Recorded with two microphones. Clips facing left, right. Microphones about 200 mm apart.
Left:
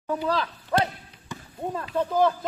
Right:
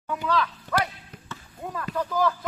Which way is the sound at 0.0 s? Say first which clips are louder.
Even; 35° left (ahead or behind).